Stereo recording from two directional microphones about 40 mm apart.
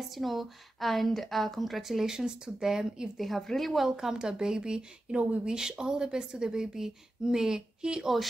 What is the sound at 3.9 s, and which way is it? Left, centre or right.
Speech, centre.